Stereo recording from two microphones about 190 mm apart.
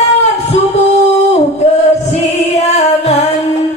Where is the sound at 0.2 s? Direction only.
35° left (ahead or behind).